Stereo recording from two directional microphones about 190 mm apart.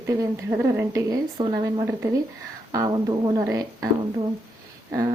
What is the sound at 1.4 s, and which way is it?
Speech, 20° right (ahead or behind).